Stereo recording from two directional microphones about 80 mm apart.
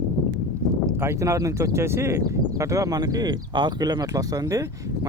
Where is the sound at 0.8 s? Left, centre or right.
Right.